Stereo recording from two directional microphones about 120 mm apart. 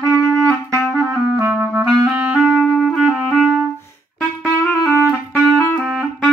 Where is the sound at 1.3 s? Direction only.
20° right (ahead or behind); by 3.5 s 5° right (ahead or behind).